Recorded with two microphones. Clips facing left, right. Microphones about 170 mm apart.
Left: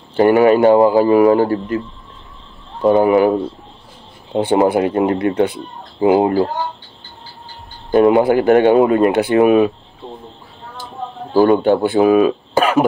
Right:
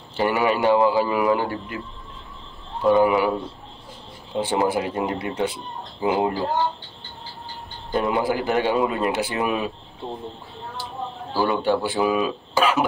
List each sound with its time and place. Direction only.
0.1 s speech: 55° left (ahead or behind)
2.8 s speech: 45° left (ahead or behind)
4.3 s speech: 60° left (ahead or behind)
7.9 s speech: 65° left (ahead or behind)
11.3 s speech: 50° left (ahead or behind)